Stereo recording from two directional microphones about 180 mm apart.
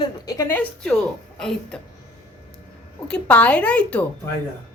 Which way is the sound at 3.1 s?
10° left (ahead or behind).